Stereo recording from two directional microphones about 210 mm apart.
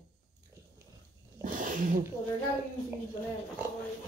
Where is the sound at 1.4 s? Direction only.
40° right (ahead or behind).